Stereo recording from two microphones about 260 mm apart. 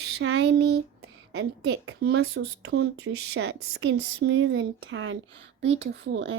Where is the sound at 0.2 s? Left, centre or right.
Right.